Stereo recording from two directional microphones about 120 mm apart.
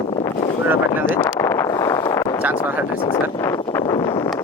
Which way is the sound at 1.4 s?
25° left (ahead or behind).